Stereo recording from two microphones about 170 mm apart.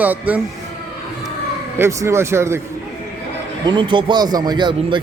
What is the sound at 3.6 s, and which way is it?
Speech, 25° right (ahead or behind).